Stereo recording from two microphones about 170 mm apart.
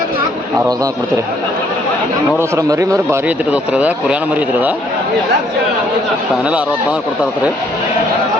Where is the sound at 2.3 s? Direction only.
15° right (ahead or behind).